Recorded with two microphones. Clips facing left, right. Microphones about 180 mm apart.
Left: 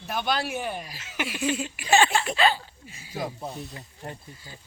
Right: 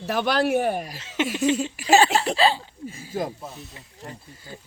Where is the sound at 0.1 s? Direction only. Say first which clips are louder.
Right 7 dB; 70° right (ahead or behind); by 0.9 s 50° right (ahead or behind).